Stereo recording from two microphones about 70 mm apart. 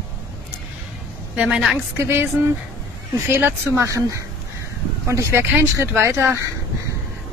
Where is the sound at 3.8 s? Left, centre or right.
Right.